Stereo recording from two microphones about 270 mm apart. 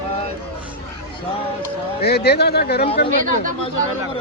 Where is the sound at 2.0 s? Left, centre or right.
Left.